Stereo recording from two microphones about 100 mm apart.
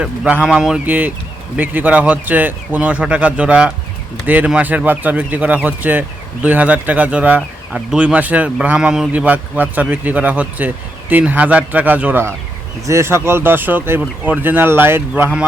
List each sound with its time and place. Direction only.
0.0 s speech: 15° right (ahead or behind)
0.4 s speech: 5° right (ahead or behind)
0.9 s speech: 20° right (ahead or behind)
12.8 s speech: 30° right (ahead or behind)